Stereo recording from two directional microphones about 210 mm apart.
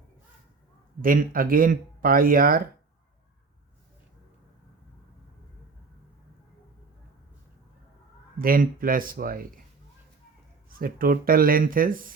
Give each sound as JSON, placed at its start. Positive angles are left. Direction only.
{"t": 1.0, "sound": "speech", "side_deg": -40}
{"t": 8.4, "sound": "speech", "side_deg": -45}
{"t": 10.7, "sound": "speech", "side_deg": -45}